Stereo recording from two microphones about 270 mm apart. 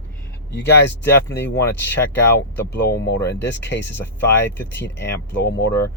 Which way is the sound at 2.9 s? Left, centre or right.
Left.